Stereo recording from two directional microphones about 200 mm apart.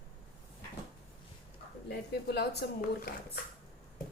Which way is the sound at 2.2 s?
55° left (ahead or behind).